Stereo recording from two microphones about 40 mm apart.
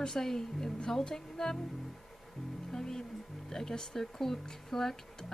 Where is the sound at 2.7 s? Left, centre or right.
Centre.